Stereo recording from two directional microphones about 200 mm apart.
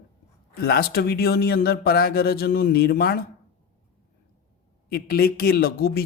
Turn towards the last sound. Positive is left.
turn(degrees=50)  # may be behind; listen again after turning